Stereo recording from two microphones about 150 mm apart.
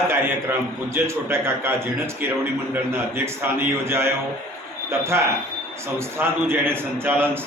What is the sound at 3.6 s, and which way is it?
Speech, 15° right (ahead or behind).